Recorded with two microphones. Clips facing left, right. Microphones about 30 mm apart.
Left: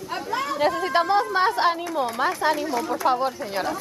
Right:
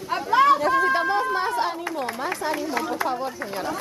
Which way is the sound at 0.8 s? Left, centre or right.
Left.